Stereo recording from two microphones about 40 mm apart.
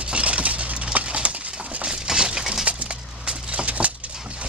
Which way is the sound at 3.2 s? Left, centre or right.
Right.